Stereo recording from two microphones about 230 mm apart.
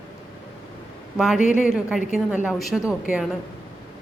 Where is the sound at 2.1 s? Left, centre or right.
Centre.